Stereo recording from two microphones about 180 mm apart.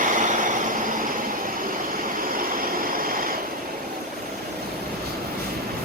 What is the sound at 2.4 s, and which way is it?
Vehicle, 50° right (ahead or behind).